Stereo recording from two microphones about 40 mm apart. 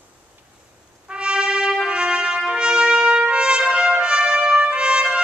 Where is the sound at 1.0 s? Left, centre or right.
Right.